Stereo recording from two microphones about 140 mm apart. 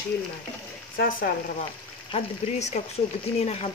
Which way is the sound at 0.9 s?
85° left.